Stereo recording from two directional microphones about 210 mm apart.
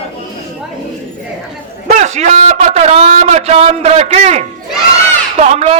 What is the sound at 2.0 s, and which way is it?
A man's voice, 35° right (ahead or behind).